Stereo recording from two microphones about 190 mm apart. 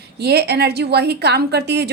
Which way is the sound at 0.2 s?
60° right (ahead or behind).